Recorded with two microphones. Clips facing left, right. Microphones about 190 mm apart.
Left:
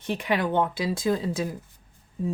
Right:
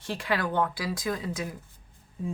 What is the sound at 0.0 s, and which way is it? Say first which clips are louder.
Speech: left 4 dB; 20° left (ahead or behind).